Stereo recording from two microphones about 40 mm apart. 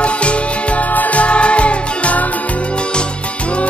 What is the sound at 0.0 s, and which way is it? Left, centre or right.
Music, left.